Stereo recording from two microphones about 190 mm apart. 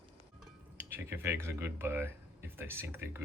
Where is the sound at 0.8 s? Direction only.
10° right (ahead or behind).